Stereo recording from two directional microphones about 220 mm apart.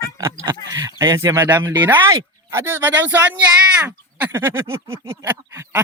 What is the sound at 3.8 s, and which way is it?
Speech, 10° right (ahead or behind).